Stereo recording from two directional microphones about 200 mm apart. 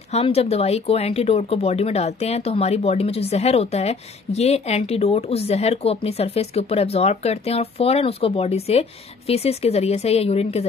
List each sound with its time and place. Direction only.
0.1 s speech: 30° left (ahead or behind)